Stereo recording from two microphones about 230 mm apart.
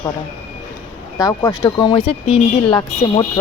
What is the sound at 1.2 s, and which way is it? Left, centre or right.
Speech, centre.